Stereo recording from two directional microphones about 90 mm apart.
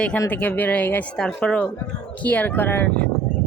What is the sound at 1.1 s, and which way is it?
Speech, 10° left (ahead or behind).